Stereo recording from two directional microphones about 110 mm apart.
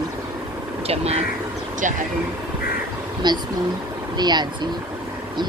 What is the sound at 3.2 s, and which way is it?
Speech, 40° right (ahead or behind).